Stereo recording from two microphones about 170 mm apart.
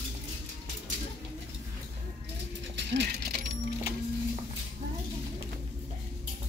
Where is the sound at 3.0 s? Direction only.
65° right (ahead or behind).